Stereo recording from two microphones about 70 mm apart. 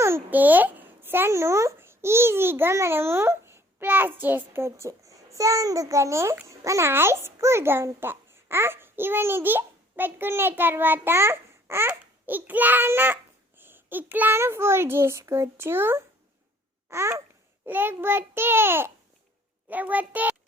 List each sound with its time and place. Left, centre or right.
0.3 s a child's voice: right
17.7 s a child's voice: right